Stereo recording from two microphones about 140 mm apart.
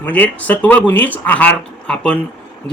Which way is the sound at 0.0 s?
10° left (ahead or behind).